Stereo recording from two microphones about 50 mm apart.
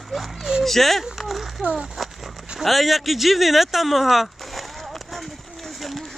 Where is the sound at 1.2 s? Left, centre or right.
Centre.